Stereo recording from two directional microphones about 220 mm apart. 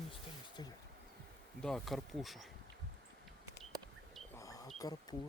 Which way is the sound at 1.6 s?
Centre (ahead or behind).